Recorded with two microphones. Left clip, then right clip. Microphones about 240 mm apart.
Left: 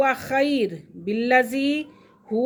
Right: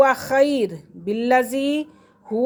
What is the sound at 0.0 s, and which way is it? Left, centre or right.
Speech, centre.